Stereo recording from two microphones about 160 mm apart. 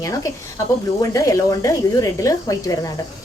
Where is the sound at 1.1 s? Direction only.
20° left (ahead or behind).